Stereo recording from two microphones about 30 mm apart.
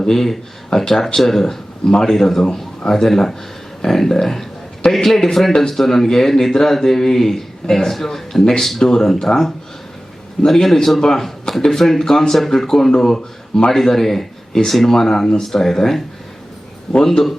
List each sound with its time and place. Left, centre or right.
0.1 s speech: centre
17.1 s speech: centre